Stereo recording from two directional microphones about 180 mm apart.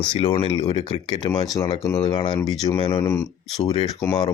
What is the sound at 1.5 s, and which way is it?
Speech, 20° left (ahead or behind).